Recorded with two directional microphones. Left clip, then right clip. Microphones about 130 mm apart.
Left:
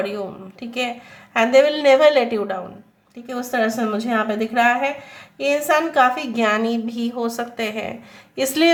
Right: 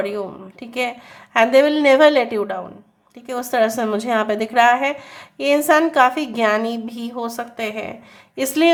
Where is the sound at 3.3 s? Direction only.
50° right (ahead or behind).